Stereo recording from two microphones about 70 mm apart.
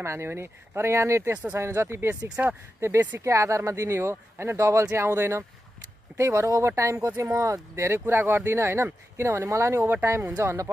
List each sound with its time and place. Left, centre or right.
0.0 s speech: right
1.3 s speech: right
1.6 s speech: right
3.2 s speech: right